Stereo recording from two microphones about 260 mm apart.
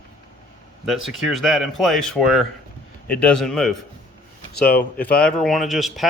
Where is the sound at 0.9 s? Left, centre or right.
Centre.